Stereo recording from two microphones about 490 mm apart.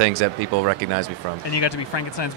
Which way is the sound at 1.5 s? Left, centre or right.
Left.